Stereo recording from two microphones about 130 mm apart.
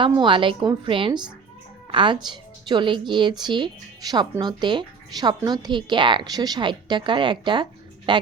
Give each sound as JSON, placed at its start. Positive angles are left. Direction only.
{"t": 0.0, "sound": "a woman's voice", "side_deg": -40}